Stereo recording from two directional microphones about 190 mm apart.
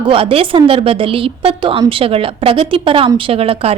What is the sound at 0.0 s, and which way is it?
A woman's voice, 25° right (ahead or behind).